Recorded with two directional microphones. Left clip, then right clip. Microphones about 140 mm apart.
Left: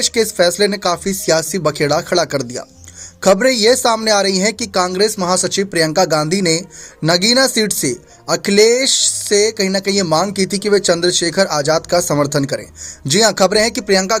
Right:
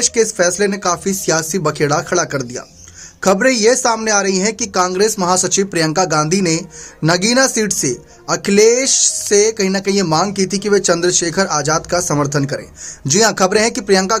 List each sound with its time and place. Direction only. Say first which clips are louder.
0.0 s speech: even; 25° left (ahead or behind)
4.9 s speech: right 1 dB; 15° left (ahead or behind)